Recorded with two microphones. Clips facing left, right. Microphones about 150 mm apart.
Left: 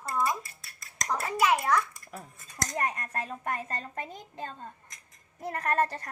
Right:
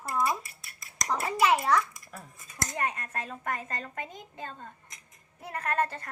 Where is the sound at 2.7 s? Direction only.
40° left (ahead or behind).